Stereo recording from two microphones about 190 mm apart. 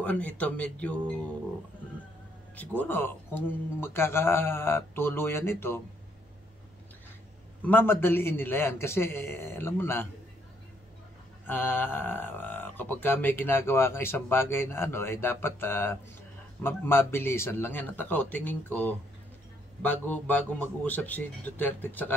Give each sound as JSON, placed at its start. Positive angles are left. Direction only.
{"t": 0.0, "sound": "speech", "side_deg": 5}
{"t": 2.5, "sound": "speech", "side_deg": 10}
{"t": 7.6, "sound": "speech", "side_deg": 10}
{"t": 11.4, "sound": "speech", "side_deg": 10}